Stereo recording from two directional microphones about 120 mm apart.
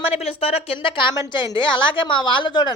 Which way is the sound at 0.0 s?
55° left (ahead or behind).